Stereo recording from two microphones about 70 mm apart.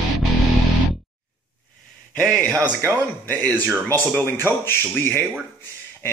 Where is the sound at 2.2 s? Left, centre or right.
Centre.